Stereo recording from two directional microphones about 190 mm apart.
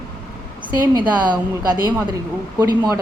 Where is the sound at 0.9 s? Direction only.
20° right (ahead or behind).